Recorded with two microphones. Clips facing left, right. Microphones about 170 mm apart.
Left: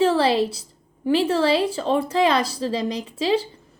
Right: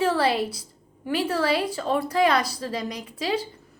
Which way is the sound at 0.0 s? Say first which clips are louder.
Left 4 dB; 25° left (ahead or behind).